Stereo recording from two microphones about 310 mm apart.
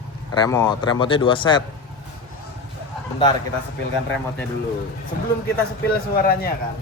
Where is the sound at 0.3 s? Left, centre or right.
Centre.